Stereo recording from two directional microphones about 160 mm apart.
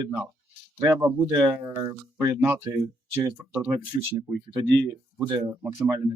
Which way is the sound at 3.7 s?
25° right (ahead or behind).